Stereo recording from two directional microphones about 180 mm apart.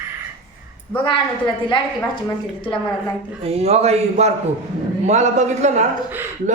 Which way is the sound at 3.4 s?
35° right (ahead or behind).